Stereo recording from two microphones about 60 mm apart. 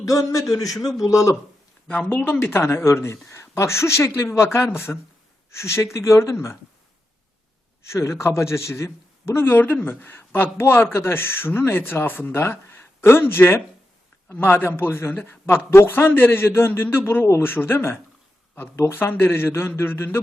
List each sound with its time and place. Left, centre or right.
0.0 s a man's voice: left
2.0 s a man's voice: left
5.5 s speech: left
7.9 s a man's voice: left
9.6 s speech: left
9.9 s speech: left
19.1 s speech: left